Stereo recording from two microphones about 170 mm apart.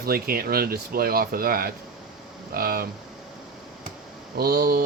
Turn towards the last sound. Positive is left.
turn(degrees=-65)  # may be behind; listen again after turning